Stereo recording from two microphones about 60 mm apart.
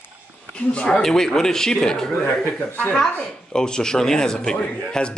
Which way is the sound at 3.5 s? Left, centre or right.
Centre.